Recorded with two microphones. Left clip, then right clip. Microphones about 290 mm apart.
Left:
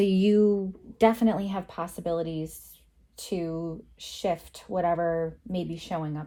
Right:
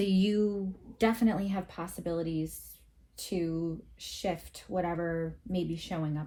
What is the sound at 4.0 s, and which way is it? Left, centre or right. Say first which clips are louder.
Speech: left 6 dB; centre.